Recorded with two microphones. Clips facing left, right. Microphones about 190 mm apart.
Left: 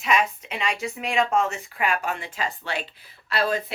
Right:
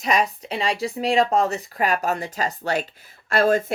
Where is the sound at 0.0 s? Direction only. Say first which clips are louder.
Right 2 dB; 40° right (ahead or behind).